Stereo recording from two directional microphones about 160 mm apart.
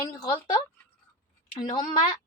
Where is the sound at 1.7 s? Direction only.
55° left (ahead or behind).